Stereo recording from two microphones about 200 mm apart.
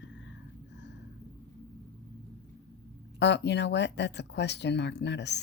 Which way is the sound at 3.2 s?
60° left (ahead or behind).